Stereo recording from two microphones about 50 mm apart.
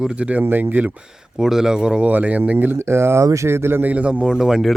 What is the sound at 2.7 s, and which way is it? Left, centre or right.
Speech, right.